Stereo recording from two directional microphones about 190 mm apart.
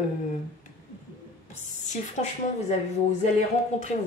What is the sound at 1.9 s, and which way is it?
Speech, 40° left (ahead or behind).